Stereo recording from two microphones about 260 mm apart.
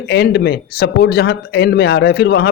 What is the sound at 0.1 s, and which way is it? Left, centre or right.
Speech, left.